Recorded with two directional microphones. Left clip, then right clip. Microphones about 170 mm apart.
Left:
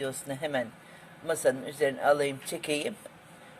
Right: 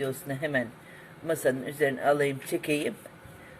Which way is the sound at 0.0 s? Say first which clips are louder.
Right 2 dB; 10° left (ahead or behind).